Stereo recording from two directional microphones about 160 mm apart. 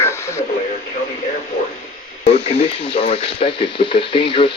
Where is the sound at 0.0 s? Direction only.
15° left (ahead or behind).